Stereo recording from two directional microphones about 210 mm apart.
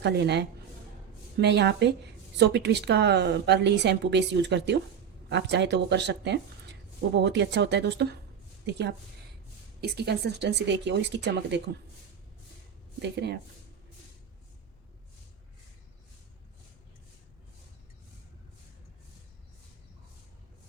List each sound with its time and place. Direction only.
0.0 s a woman's voice: 55° right (ahead or behind)
13.0 s a woman's voice: 55° right (ahead or behind)